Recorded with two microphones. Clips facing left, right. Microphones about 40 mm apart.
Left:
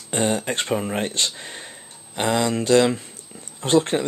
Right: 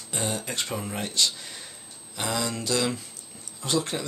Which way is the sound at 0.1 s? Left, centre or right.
Left.